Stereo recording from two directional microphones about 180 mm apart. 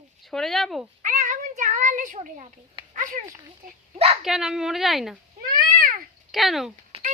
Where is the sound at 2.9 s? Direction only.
45° right (ahead or behind).